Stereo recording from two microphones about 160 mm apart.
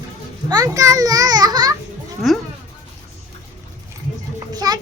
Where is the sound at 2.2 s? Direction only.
Centre (ahead or behind).